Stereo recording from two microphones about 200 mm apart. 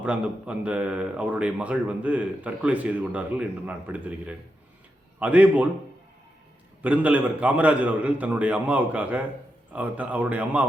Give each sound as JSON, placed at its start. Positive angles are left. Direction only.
{"t": 0.0, "sound": "a man's voice", "side_deg": -5}
{"t": 6.8, "sound": "a man's voice", "side_deg": -5}